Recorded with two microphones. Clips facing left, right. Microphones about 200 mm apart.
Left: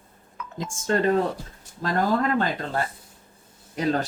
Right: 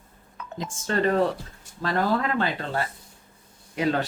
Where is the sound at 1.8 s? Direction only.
45° left (ahead or behind).